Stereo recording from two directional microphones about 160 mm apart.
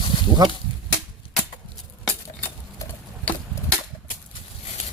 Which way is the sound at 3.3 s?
10° left (ahead or behind).